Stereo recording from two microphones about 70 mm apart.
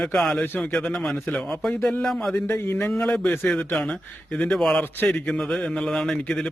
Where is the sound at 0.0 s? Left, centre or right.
Centre; by 1.4 s left.